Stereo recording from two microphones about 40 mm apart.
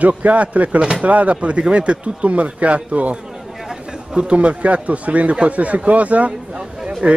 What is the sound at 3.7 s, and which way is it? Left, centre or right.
Chatter, centre.